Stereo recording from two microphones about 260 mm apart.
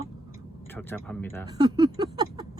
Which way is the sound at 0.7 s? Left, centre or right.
Centre.